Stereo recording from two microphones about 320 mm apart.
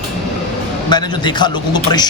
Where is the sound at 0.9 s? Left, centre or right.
Centre.